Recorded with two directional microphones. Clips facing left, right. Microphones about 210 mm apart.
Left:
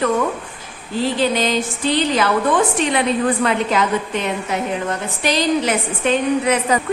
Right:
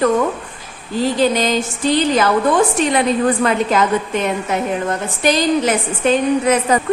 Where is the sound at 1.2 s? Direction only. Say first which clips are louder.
Right 3 dB; 45° right (ahead or behind).